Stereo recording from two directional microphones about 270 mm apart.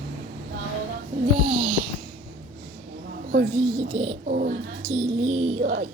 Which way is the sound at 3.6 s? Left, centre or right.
Right.